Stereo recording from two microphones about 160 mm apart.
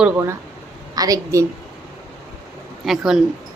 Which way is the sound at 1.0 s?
20° right (ahead or behind).